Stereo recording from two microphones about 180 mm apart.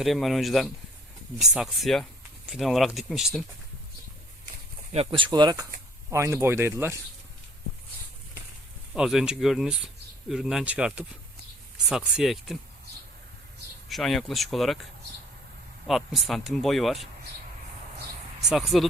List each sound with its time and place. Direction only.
0.0 s speech: centre (ahead or behind)
4.9 s speech: 30° right (ahead or behind); by 7.0 s 15° right (ahead or behind)
9.0 s speech: 5° right (ahead or behind)
13.8 s speech: centre (ahead or behind)
15.9 s speech: centre (ahead or behind)
18.4 s speech: centre (ahead or behind)